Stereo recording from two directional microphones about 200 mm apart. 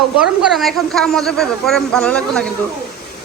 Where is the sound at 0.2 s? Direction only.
Centre (ahead or behind).